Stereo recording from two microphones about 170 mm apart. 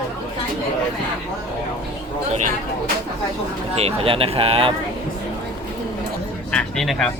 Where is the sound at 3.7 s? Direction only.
35° right (ahead or behind).